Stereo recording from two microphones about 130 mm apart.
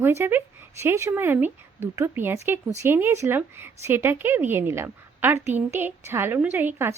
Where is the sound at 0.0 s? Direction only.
20° right (ahead or behind).